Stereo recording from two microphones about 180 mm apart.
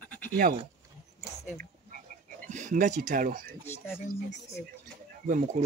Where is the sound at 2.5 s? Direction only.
45° right (ahead or behind).